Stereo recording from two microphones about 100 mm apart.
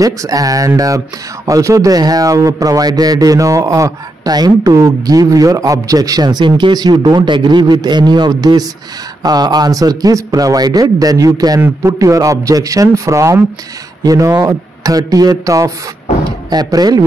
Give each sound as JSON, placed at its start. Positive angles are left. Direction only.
{"t": 0.0, "sound": "speech", "side_deg": -35}